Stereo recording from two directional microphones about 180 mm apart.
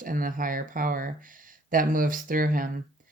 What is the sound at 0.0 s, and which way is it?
Speech, 50° right (ahead or behind).